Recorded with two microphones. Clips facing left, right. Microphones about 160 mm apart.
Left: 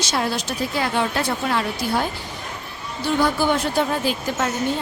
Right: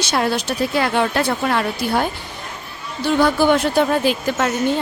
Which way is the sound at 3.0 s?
70° right (ahead or behind).